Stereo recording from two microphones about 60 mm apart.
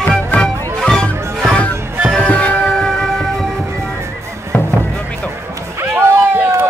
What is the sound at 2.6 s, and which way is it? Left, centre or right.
Vehicle, centre.